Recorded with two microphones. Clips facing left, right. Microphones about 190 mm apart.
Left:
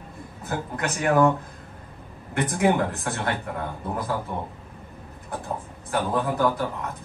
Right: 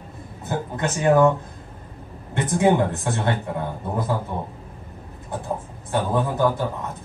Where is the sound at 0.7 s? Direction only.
25° right (ahead or behind).